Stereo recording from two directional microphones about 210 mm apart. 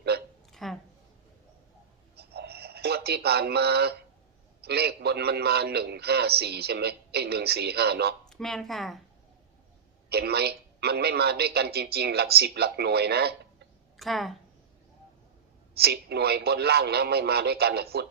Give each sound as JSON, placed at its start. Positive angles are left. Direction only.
{"t": 0.1, "sound": "hiccup", "side_deg": -50}
{"t": 0.5, "sound": "a sound", "side_deg": 0}
{"t": 2.1, "sound": "a sound", "side_deg": -50}
{"t": 4.6, "sound": "a man's voice", "side_deg": -50}
{"t": 8.3, "sound": "speech", "side_deg": 0}
{"t": 10.1, "sound": "a man's voice", "side_deg": -50}
{"t": 13.9, "sound": "speech", "side_deg": 0}
{"t": 15.7, "sound": "a man's voice", "side_deg": -50}